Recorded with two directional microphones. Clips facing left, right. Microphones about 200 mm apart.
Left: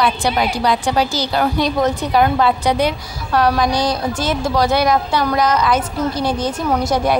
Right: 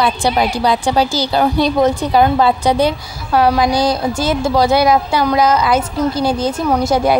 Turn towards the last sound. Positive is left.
turn(degrees=-30)  # may be behind; listen again after turning